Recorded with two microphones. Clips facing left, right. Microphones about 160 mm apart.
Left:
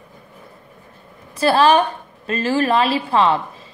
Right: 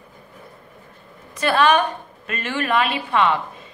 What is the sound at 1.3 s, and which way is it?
A woman's voice, 35° left (ahead or behind).